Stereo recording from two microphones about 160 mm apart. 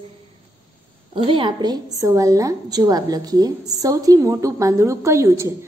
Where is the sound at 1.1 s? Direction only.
30° right (ahead or behind).